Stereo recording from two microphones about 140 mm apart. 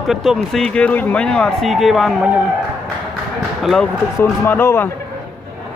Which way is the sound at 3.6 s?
Centre (ahead or behind).